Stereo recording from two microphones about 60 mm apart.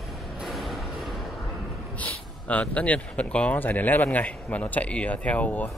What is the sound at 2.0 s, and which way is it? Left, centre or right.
Speech, left.